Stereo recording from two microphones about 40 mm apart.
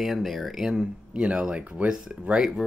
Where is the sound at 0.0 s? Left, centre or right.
Centre.